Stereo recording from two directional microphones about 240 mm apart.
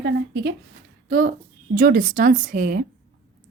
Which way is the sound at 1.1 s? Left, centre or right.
Right.